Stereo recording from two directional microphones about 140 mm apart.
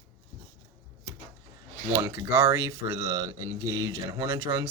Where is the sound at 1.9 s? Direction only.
20° right (ahead or behind).